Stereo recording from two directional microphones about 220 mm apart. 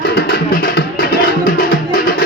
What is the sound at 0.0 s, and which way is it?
Music, 45° left (ahead or behind).